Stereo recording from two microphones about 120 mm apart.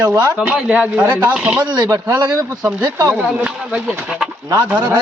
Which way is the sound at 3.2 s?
5° right (ahead or behind).